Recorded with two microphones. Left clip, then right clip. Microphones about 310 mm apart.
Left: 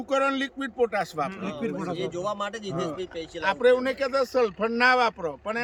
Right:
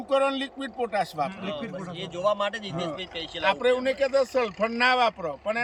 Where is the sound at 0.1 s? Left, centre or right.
Centre.